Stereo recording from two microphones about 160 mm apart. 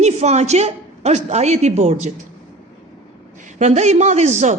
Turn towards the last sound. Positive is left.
turn(degrees=-45)  # may be behind; listen again after turning